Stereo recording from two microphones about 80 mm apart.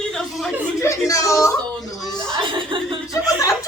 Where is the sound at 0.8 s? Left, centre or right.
Left.